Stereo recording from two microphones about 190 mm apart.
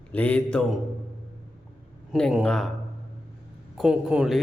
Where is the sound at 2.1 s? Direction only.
Centre (ahead or behind).